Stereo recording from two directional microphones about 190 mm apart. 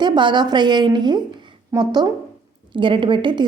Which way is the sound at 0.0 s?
25° right (ahead or behind).